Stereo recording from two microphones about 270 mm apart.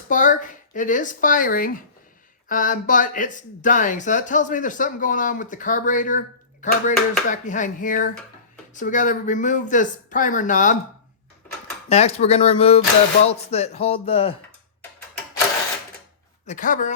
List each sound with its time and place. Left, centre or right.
0.1 s speech: left
11.9 s speech: left
16.5 s speech: left